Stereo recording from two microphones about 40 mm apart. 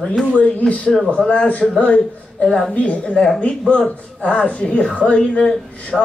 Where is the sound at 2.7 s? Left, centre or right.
Left.